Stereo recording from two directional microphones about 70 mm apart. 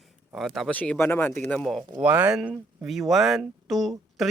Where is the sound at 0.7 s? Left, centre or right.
Left.